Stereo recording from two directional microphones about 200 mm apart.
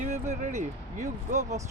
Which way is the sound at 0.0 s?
40° right (ahead or behind).